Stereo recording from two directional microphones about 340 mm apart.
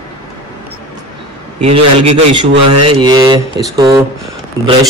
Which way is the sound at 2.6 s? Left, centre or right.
Right.